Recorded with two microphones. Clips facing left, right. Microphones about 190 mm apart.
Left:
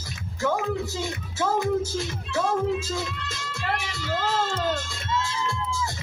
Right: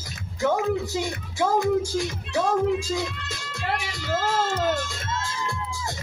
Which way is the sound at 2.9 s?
15° right (ahead or behind).